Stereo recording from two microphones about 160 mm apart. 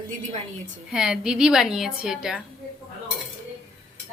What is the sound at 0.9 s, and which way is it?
A woman's voice, 5° right (ahead or behind).